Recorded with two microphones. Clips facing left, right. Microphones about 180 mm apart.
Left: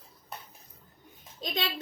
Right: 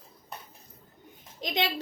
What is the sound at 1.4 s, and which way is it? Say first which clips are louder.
Speech: right 4 dB; 20° right (ahead or behind).